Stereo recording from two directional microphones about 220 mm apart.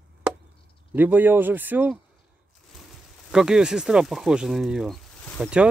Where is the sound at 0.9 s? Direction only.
10° right (ahead or behind).